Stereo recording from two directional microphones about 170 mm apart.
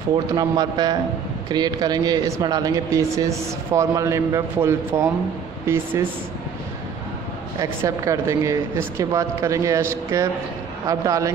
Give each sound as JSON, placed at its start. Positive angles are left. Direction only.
{"t": 0.3, "sound": "speech", "side_deg": -25}
{"t": 7.8, "sound": "a woman's voice", "side_deg": -20}